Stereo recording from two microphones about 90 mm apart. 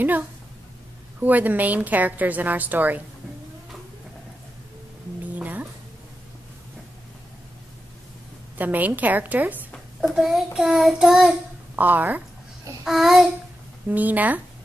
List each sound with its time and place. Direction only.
1.2 s a woman's voice: 20° right (ahead or behind)
5.3 s a sound: 20° right (ahead or behind)
8.5 s a woman's voice: 20° right (ahead or behind)
9.9 s child singing: 5° right (ahead or behind)
11.7 s a woman's voice: 20° right (ahead or behind)
12.8 s child singing: 5° right (ahead or behind)
13.8 s a woman's voice: 20° right (ahead or behind)